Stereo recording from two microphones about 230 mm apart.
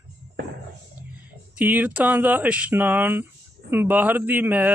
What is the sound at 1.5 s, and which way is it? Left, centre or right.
Speech, centre.